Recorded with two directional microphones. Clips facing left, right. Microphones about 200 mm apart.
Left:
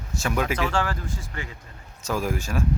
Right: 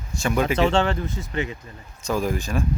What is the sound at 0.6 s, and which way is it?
Speech, 25° right (ahead or behind).